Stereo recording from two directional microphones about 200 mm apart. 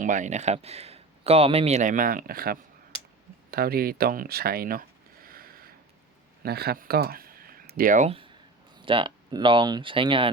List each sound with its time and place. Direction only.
0.0 s a man's voice: 40° right (ahead or behind)
3.5 s a sound: 50° right (ahead or behind)
6.4 s speech: 50° right (ahead or behind); by 10.3 s 25° right (ahead or behind)